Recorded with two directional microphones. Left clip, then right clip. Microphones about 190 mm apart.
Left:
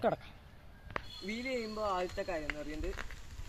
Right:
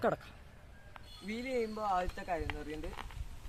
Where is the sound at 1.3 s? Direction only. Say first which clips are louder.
Right 2 dB; 20° right (ahead or behind).